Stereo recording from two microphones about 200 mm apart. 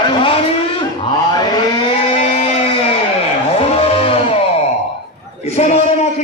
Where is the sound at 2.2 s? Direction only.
30° left (ahead or behind).